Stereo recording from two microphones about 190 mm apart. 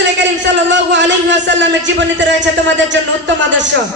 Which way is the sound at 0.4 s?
70° right (ahead or behind).